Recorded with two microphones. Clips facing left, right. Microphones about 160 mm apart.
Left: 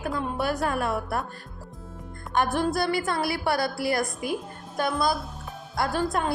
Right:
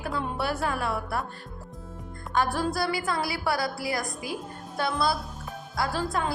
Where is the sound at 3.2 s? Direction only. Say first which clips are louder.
Left 2 dB; 60° left (ahead or behind).